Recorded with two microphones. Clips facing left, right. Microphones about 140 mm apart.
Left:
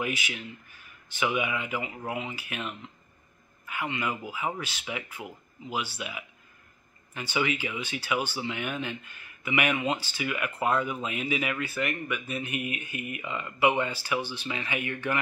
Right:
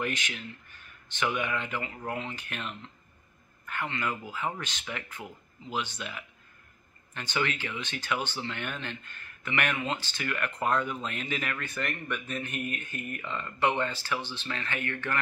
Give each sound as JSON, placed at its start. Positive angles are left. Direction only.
{"t": 0.0, "sound": "speech", "side_deg": 10}